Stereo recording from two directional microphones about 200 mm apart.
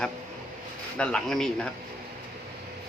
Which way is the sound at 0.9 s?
5° left (ahead or behind).